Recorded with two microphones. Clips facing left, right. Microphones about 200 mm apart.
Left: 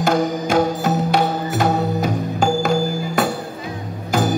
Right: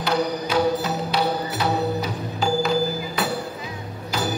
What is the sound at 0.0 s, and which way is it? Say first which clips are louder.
Music: left 5 dB; 45° left (ahead or behind).